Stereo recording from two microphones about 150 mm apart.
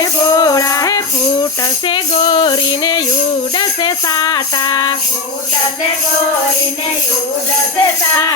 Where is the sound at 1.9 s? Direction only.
35° left (ahead or behind).